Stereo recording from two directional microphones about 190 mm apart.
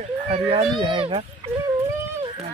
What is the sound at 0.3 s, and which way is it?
Speech, 30° right (ahead or behind).